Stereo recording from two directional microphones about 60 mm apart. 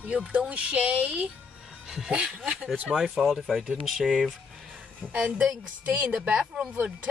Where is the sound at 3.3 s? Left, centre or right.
Centre.